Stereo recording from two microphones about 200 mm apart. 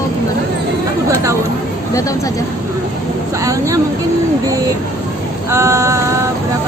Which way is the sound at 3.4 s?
15° right (ahead or behind).